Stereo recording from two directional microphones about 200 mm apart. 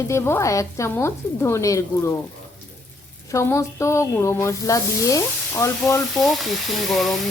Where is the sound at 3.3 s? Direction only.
15° left (ahead or behind).